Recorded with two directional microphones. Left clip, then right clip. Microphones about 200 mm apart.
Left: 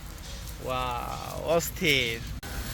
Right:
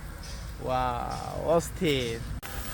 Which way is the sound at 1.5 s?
30° right (ahead or behind).